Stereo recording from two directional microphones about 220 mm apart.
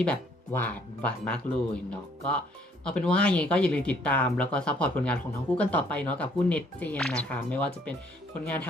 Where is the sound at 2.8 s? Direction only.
5° left (ahead or behind).